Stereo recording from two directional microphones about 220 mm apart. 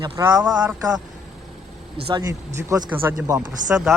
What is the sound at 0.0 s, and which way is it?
Speech, 15° right (ahead or behind).